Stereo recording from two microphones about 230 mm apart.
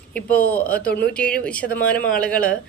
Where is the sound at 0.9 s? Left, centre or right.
Left.